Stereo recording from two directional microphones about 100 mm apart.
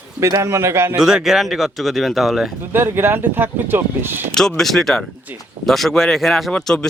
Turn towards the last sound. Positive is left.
turn(degrees=5)  # may be behind; listen again after turning